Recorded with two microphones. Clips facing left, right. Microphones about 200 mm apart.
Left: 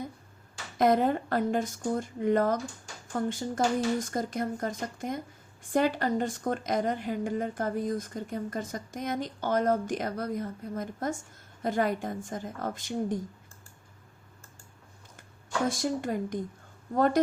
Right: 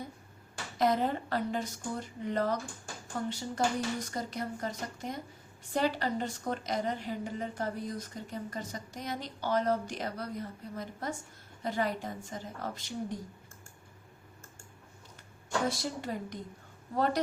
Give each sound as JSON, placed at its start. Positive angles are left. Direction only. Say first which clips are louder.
{"t": 0.8, "sound": "a woman's voice", "louder": "left 5 dB", "side_deg": 50}
{"t": 15.7, "sound": "a woman's voice", "louder": "left 6 dB", "side_deg": 50}